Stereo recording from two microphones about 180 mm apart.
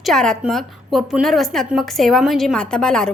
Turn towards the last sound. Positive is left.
turn(degrees=5)  # may be behind; listen again after turning